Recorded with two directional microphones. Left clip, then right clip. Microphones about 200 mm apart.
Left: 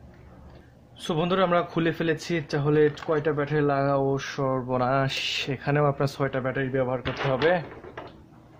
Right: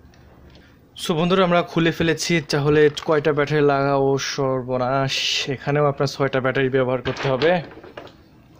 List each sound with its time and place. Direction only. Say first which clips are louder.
0.9 s a man's voice: right 6 dB; 35° right (ahead or behind)
4.6 s speech: right 3 dB; 15° right (ahead or behind)
6.3 s a man's voice: right 7 dB; 40° right (ahead or behind)